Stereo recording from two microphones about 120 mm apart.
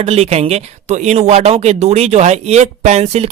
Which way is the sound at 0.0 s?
65° right (ahead or behind).